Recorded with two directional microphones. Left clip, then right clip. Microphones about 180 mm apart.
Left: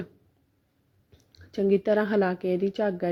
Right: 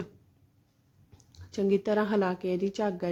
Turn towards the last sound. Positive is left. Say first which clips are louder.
# left 4 dB
turn(degrees=15)  # may be behind; listen again after turning